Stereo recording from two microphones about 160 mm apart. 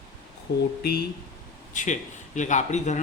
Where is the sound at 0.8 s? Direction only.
75° left (ahead or behind).